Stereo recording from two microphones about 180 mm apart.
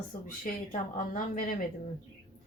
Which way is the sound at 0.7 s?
45° left (ahead or behind).